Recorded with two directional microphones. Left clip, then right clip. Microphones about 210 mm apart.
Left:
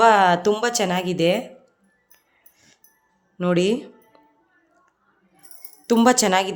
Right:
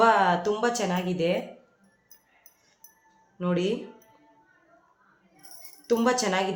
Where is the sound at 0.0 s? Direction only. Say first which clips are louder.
Left 6 dB; 50° left (ahead or behind).